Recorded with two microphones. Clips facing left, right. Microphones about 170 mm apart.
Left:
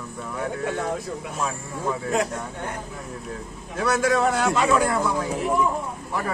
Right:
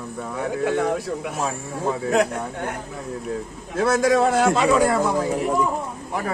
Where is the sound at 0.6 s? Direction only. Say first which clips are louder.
Right 8 dB; 70° right (ahead or behind).